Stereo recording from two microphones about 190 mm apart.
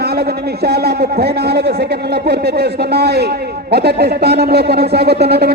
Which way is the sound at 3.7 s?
60° right (ahead or behind).